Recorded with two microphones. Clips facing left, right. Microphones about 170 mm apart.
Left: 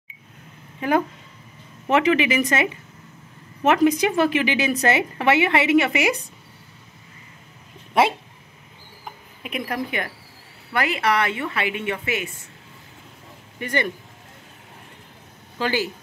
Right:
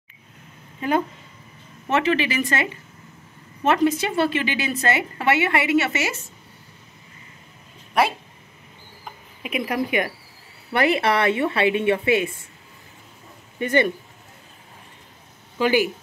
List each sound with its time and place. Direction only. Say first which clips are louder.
1.9 s a woman's voice: left 3 dB; 15° left (ahead or behind)
8.0 s speech: left 2 dB; 25° left (ahead or behind)
9.4 s a woman's voice: right 3 dB; 5° right (ahead or behind)
10.7 s a woman's voice: right 3 dB; 25° right (ahead or behind)
13.6 s speech: right 5 dB; 20° right (ahead or behind)
15.6 s a woman's voice: right 5 dB; 15° right (ahead or behind)